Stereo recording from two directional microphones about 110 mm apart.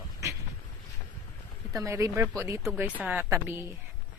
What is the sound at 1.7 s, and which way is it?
Speech, 30° right (ahead or behind).